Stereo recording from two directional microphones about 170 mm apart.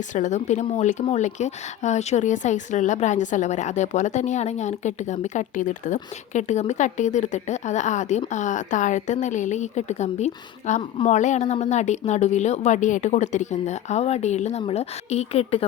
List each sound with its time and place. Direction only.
0.1 s a woman's voice: 45° left (ahead or behind)